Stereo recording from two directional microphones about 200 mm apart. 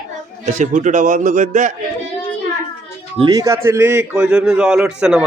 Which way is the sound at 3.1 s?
20° right (ahead or behind).